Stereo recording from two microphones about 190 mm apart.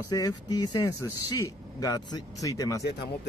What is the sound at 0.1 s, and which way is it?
Speech, 20° left (ahead or behind).